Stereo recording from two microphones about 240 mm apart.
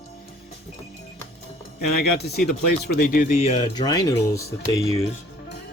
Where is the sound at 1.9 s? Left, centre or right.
Left.